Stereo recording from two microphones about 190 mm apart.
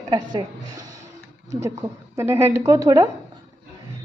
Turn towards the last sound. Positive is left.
turn(degrees=-15)  # may be behind; listen again after turning